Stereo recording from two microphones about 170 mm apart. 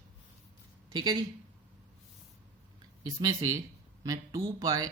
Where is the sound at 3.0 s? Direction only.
20° right (ahead or behind).